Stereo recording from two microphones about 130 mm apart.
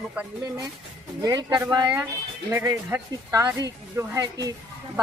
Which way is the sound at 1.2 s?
35° right (ahead or behind).